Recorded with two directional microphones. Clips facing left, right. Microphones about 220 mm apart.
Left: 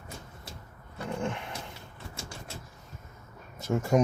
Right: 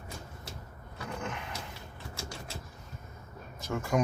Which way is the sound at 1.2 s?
25° left (ahead or behind).